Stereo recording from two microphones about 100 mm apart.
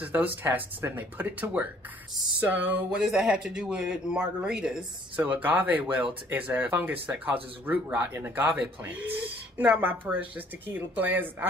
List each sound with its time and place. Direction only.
0.0 s speech: 20° right (ahead or behind)
2.9 s speech: 10° right (ahead or behind)